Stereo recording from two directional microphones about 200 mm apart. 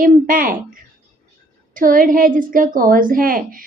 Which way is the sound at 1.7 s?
45° right (ahead or behind).